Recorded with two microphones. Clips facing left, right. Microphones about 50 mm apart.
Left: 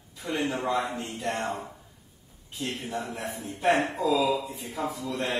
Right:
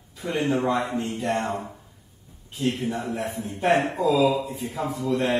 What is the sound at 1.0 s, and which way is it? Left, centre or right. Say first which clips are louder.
Speech: right 5 dB; centre.